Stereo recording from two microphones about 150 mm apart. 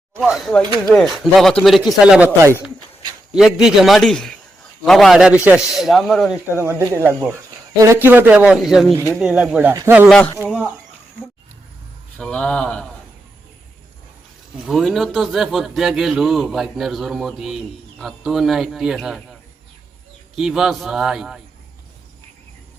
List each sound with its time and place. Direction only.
0.1 s a man's voice: centre (ahead or behind)
3.3 s a man's voice: 5° right (ahead or behind)
6.6 s speech: 15° right (ahead or behind)
9.0 s speech: 15° right (ahead or behind)
9.2 s speech: 5° right (ahead or behind)
12.1 s speech: 5° left (ahead or behind)
14.6 s a man's voice: centre (ahead or behind)